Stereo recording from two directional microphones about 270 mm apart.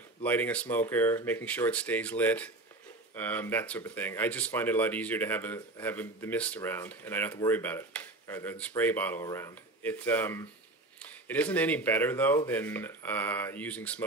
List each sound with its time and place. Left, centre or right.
0.2 s speech: centre